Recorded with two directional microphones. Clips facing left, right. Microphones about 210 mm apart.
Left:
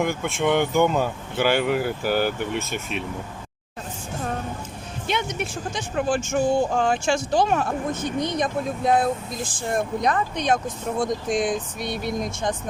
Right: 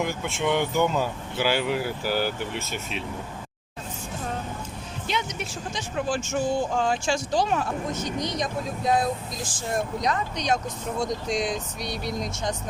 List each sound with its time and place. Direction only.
0.0 s speech: 55° left (ahead or behind)
5.0 s speech: 55° left (ahead or behind)